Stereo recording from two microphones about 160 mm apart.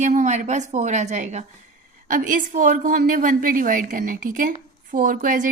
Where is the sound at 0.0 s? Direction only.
50° right (ahead or behind).